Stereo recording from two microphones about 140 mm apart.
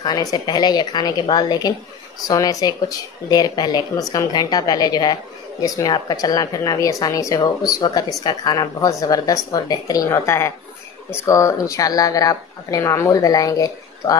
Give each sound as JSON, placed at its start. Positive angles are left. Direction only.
{"t": 0.0, "sound": "speech", "side_deg": 30}